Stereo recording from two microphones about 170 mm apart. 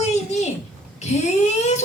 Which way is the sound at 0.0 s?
40° left (ahead or behind).